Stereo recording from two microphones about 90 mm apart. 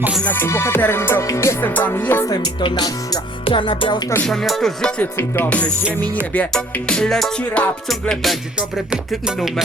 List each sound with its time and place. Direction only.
0.3 s music: 25° left (ahead or behind)
1.6 s music: 20° left (ahead or behind)
2.3 s speech: 55° left (ahead or behind)
3.4 s music: 70° left (ahead or behind)
4.3 s music: 5° left (ahead or behind)
8.9 s music: 5° right (ahead or behind)